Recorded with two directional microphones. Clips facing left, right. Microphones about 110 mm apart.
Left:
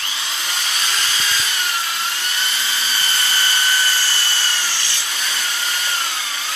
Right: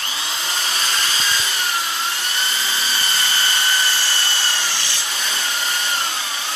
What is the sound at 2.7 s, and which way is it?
Vacuum cleaner, 25° right (ahead or behind).